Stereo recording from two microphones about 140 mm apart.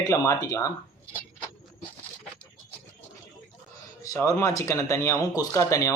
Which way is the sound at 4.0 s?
25° left (ahead or behind).